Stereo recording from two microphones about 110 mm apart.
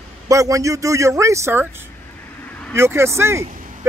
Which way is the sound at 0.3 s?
30° right (ahead or behind).